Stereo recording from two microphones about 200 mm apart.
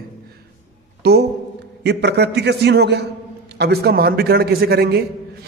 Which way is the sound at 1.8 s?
55° right (ahead or behind).